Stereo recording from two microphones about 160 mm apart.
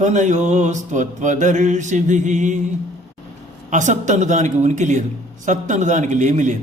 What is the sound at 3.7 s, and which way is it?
Mantra, 50° right (ahead or behind).